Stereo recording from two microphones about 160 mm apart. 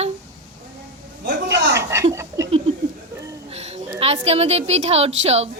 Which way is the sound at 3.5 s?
40° right (ahead or behind).